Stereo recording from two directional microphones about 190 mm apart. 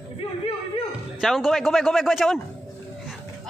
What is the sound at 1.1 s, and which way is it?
A man's voice, centre (ahead or behind).